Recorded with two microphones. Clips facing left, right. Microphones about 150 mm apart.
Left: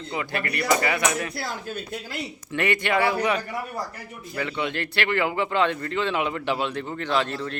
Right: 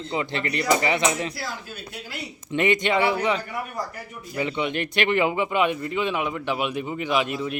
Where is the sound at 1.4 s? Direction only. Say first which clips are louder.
Left 3 dB; 45° left (ahead or behind).